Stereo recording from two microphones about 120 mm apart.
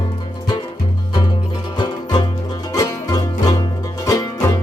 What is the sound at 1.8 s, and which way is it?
Music, 35° left (ahead or behind).